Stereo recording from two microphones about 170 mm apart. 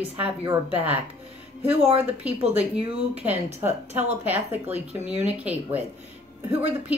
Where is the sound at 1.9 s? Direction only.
10° right (ahead or behind).